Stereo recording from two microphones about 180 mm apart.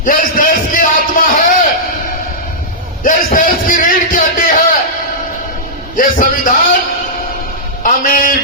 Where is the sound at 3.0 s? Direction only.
50° left (ahead or behind).